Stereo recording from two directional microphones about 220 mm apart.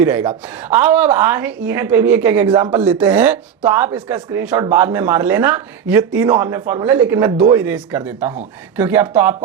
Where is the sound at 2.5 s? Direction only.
20° right (ahead or behind).